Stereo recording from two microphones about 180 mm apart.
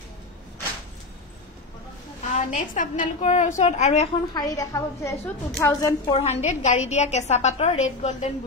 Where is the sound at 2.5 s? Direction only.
45° left (ahead or behind).